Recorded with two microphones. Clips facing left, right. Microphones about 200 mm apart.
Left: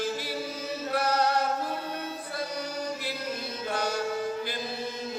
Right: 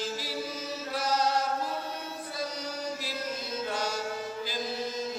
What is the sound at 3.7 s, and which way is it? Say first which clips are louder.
Music: left 5 dB; 60° left (ahead or behind).